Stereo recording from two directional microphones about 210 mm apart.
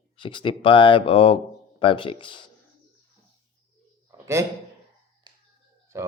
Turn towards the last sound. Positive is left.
turn(degrees=-15)  # may be behind; listen again after turning